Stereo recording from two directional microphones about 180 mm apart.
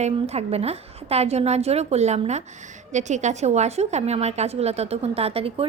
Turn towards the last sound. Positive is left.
turn(degrees=-35)  # may be behind; listen again after turning